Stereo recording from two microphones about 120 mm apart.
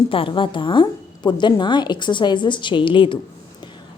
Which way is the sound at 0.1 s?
45° left (ahead or behind).